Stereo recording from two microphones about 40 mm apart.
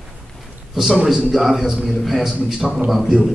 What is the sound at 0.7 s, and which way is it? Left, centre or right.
A man's voice, centre.